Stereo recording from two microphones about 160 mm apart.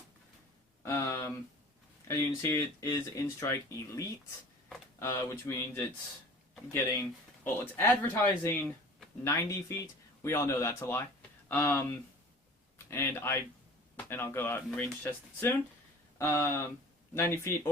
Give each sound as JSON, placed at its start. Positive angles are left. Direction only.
{"t": 0.8, "sound": "a sound", "side_deg": 15}
{"t": 2.0, "sound": "speech", "side_deg": 15}
{"t": 6.9, "sound": "speech", "side_deg": 10}